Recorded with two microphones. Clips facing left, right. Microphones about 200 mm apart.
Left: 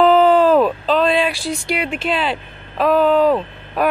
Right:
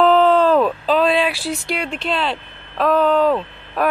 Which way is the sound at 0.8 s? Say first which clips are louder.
Even; 5° right (ahead or behind).